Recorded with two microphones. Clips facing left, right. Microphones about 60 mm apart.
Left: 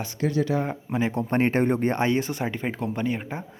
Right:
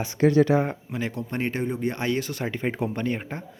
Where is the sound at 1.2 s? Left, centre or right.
Left.